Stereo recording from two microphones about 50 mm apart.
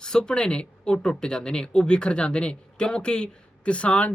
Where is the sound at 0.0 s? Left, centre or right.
Centre.